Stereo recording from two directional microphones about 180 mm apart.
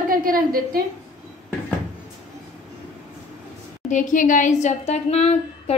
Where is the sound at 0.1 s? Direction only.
50° right (ahead or behind).